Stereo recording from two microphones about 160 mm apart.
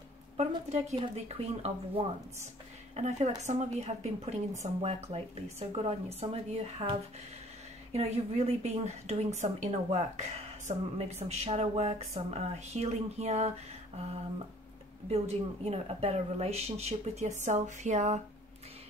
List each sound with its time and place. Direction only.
0.9 s speech: 40° right (ahead or behind)
15.0 s speech: 40° right (ahead or behind)